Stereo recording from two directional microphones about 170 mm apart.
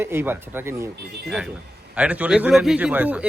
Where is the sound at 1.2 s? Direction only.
5° right (ahead or behind).